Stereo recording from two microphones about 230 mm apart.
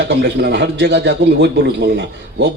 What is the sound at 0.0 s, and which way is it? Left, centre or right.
Speech, right.